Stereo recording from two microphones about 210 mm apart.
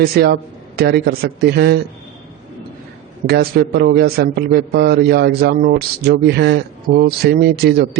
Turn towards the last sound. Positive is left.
turn(degrees=-50)  # may be behind; listen again after turning